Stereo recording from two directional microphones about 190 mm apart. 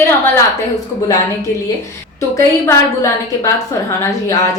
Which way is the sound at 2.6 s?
15° left (ahead or behind).